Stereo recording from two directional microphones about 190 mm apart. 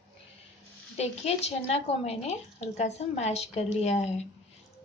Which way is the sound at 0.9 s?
35° left (ahead or behind).